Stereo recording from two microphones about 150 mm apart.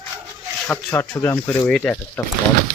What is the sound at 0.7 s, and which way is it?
Speech, 10° left (ahead or behind).